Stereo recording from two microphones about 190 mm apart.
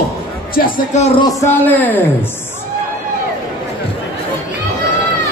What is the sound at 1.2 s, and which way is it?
Speech, 10° left (ahead or behind).